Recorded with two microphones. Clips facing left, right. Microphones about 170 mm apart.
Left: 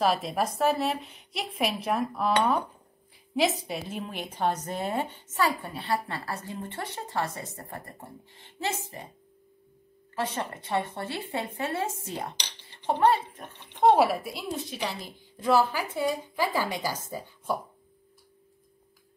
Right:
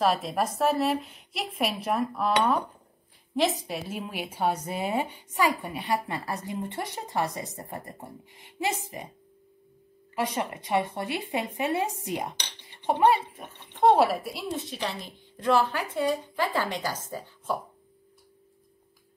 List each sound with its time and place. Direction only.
0.0 s a woman's voice: centre (ahead or behind)
10.1 s a woman's voice: 15° right (ahead or behind)
13.9 s a woman's voice: centre (ahead or behind)